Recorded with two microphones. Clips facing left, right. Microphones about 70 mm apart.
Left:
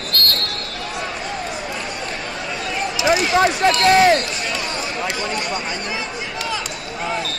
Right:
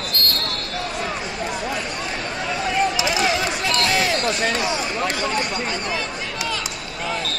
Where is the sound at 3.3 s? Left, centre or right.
Left.